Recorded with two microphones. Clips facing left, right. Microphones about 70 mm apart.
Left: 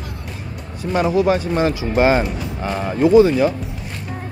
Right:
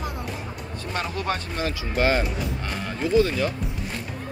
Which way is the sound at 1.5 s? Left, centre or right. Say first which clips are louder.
Left 9 dB; left.